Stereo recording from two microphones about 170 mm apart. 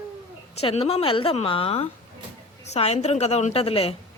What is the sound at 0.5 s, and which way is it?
Speech, 35° left (ahead or behind).